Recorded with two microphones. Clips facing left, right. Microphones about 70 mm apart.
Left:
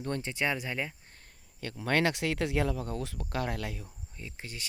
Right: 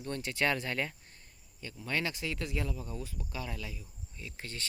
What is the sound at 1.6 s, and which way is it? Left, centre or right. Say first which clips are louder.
Speech: left 7 dB; left.